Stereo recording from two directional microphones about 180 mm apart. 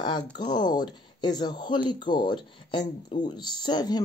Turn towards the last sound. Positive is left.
turn(degrees=25)  # may be behind; listen again after turning